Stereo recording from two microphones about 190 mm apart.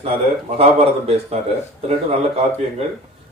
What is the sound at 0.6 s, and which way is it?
Speech, 30° right (ahead or behind).